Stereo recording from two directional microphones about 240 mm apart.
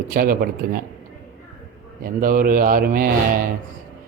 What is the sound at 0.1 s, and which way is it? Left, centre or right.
Speech, right.